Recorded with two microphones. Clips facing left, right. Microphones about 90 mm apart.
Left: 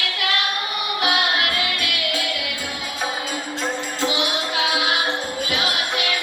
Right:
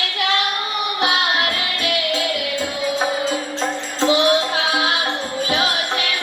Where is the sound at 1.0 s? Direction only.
30° right (ahead or behind).